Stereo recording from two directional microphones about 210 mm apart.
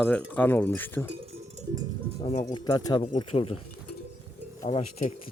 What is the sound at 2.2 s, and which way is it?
Music, 30° left (ahead or behind).